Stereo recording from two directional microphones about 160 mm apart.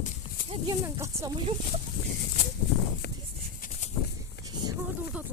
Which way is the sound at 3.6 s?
60° left (ahead or behind).